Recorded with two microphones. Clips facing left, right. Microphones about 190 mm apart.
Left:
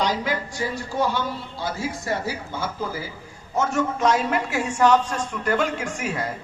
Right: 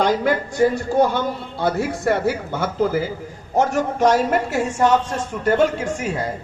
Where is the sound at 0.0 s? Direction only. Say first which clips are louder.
Right 6 dB; 50° right (ahead or behind).